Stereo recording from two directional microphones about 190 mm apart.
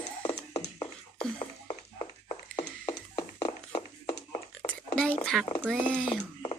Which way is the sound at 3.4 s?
25° left (ahead or behind).